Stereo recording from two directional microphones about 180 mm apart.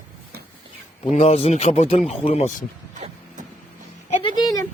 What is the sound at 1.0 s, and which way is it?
Speech, 35° left (ahead or behind).